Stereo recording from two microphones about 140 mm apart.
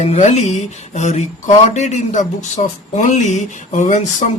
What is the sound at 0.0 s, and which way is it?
Speech, 50° left (ahead or behind).